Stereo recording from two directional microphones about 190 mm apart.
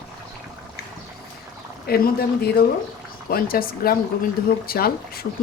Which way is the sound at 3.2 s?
50° left (ahead or behind).